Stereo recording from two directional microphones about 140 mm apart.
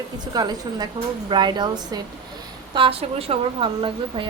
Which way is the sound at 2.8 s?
45° right (ahead or behind).